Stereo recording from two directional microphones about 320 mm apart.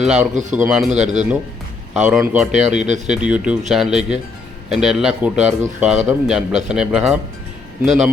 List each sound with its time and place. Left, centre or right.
0.0 s speech: centre
1.0 s speech: right
1.9 s speech: centre
2.5 s speech: right
3.1 s speech: centre